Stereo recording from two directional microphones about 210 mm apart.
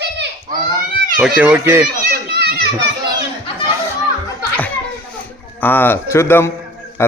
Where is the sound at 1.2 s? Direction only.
5° right (ahead or behind).